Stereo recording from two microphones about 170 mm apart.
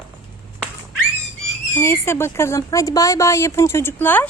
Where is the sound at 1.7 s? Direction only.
15° left (ahead or behind).